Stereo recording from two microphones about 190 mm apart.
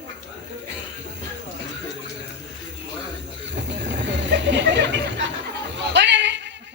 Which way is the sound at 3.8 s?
70° right (ahead or behind).